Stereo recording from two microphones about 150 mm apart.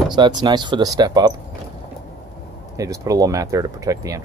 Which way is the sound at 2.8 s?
20° right (ahead or behind).